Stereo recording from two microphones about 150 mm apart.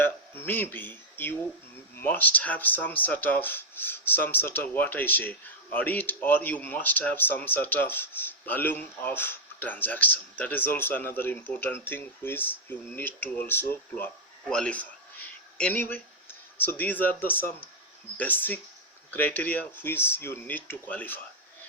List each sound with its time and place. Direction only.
0.0 s speech: 15° left (ahead or behind)